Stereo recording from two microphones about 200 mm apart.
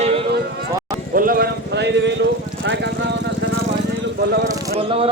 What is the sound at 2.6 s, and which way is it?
Vehicle, 60° right (ahead or behind).